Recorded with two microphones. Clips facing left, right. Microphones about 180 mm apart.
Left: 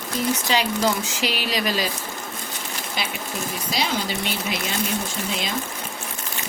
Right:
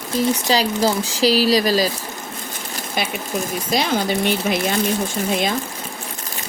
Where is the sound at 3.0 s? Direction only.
55° right (ahead or behind).